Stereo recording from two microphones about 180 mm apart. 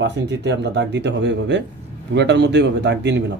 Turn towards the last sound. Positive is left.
turn(degrees=-75)  # may be behind; listen again after turning